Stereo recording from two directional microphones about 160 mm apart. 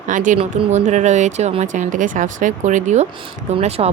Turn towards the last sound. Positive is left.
turn(degrees=-40)  # may be behind; listen again after turning